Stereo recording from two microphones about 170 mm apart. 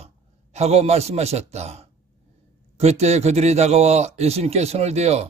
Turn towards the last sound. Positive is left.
turn(degrees=-40)  # may be behind; listen again after turning